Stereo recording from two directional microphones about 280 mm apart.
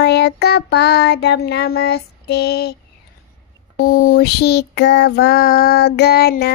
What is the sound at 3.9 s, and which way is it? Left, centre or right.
Child singing, left.